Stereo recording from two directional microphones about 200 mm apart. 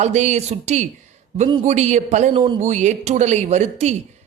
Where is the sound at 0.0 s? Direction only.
35° right (ahead or behind).